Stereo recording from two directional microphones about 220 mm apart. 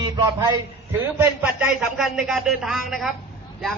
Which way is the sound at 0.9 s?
10° right (ahead or behind).